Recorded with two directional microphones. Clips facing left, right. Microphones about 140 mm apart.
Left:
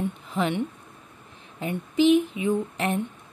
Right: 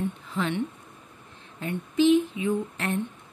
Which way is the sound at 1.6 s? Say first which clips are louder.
Left 1 dB; 15° left (ahead or behind).